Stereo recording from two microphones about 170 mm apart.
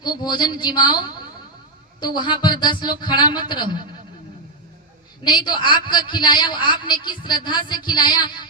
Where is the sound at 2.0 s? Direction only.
25° left (ahead or behind).